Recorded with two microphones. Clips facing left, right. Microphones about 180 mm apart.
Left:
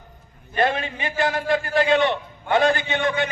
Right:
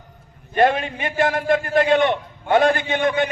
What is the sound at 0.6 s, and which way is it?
A man's voice, 50° right (ahead or behind).